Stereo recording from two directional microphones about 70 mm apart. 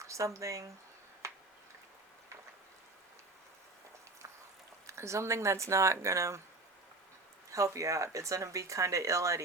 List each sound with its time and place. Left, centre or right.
0.0 s a sound: right
0.3 s speech: right
1.2 s tick-tock: right
4.9 s speech: right
7.5 s speech: right